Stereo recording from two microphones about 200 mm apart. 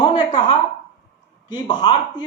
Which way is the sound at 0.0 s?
25° left (ahead or behind).